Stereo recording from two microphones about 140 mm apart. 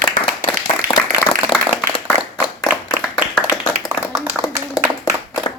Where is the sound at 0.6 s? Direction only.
30° left (ahead or behind).